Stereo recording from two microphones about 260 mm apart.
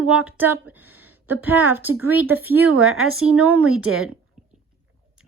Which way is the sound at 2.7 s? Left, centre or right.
Right.